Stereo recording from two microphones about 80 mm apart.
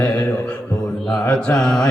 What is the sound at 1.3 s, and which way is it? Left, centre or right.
Mantra, centre.